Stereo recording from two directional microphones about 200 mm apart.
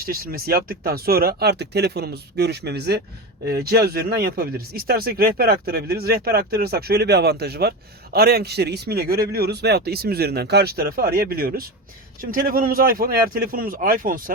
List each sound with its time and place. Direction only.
0.0 s speech: 50° right (ahead or behind)